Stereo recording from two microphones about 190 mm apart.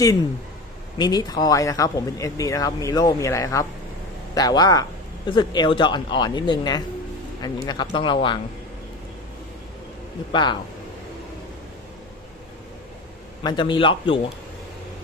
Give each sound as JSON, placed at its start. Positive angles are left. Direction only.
{"t": 0.9, "sound": "speech", "side_deg": 20}
{"t": 10.3, "sound": "speech", "side_deg": 25}
{"t": 13.4, "sound": "speech", "side_deg": 25}